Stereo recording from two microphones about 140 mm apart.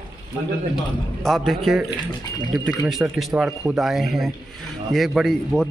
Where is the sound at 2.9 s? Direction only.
Centre (ahead or behind).